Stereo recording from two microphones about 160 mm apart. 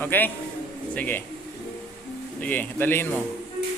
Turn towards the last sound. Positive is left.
turn(degrees=15)  # may be behind; listen again after turning